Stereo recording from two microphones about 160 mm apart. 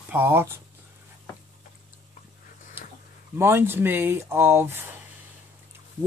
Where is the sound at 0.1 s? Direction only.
15° right (ahead or behind).